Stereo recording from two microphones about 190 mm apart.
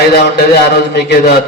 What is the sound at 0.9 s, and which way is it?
Speech, 60° left (ahead or behind).